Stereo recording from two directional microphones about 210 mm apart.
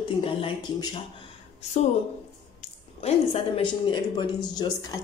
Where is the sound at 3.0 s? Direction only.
30° left (ahead or behind).